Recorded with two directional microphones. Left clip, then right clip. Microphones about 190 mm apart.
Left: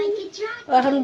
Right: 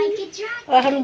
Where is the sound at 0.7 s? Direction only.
Centre (ahead or behind).